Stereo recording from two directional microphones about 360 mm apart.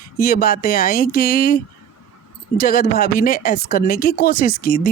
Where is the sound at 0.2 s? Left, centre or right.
Left.